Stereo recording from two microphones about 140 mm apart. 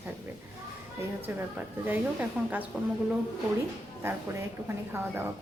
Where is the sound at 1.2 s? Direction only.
15° right (ahead or behind).